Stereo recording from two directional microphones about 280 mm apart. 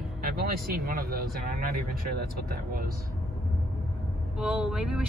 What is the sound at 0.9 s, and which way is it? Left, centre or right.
Speech, right.